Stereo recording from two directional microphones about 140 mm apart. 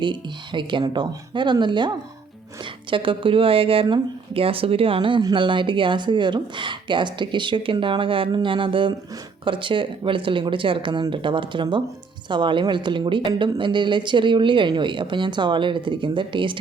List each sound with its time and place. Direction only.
0.0 s speech: 35° right (ahead or behind)